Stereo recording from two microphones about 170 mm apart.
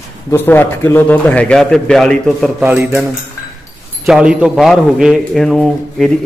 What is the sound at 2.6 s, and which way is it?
A man's voice, 10° right (ahead or behind).